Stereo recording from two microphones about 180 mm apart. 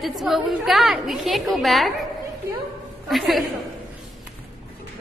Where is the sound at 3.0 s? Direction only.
Centre (ahead or behind).